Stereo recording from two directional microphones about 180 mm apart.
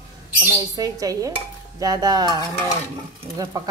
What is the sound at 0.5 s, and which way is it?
Stir, 20° right (ahead or behind).